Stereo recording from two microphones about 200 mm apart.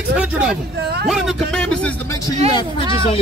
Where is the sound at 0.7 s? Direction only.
55° right (ahead or behind).